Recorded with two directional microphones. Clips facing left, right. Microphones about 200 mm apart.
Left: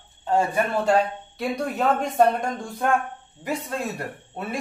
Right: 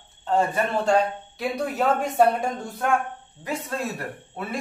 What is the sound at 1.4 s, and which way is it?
Speech, 5° right (ahead or behind).